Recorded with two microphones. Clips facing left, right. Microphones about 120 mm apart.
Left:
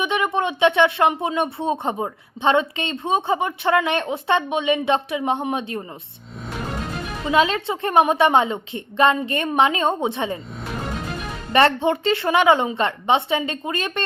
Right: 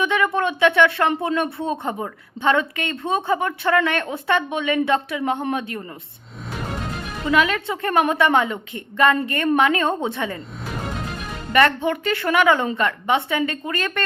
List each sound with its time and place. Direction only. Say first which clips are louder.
0.0 s speech: right 1 dB; 20° left (ahead or behind)
7.3 s speech: left 1 dB; 25° left (ahead or behind)
11.5 s speech: left 1 dB; 25° left (ahead or behind)